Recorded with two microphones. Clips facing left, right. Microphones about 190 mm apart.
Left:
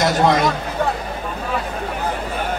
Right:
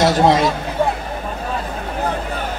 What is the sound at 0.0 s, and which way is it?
Speech, 25° right (ahead or behind).